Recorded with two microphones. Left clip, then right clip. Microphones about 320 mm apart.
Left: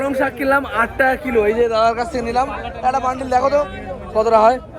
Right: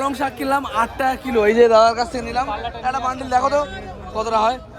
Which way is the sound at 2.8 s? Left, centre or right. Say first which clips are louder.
Left 6 dB; centre.